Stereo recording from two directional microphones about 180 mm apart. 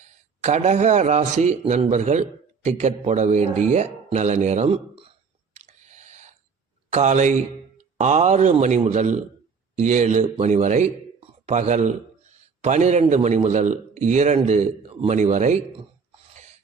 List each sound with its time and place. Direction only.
0.4 s speech: 40° right (ahead or behind)
5.5 s a sound: 40° right (ahead or behind)
6.9 s speech: 40° right (ahead or behind)